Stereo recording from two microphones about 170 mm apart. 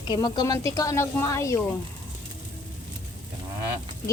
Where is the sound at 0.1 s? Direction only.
25° left (ahead or behind).